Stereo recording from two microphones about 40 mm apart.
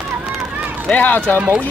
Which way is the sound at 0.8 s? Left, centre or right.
Left.